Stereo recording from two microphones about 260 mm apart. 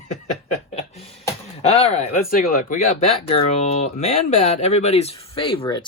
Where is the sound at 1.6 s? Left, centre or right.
Left.